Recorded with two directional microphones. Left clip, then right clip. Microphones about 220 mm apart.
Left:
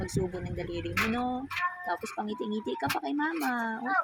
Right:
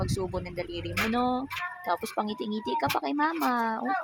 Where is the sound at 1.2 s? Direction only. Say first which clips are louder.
Right 5 dB; 20° right (ahead or behind).